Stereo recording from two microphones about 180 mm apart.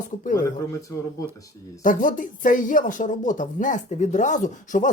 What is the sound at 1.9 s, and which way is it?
Speech, 50° left (ahead or behind).